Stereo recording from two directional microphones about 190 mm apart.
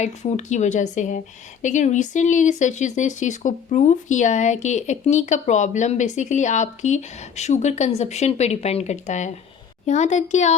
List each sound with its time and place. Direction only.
0.0 s speech: 35° left (ahead or behind)